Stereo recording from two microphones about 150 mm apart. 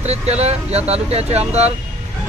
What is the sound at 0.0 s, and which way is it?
Speech, 45° right (ahead or behind).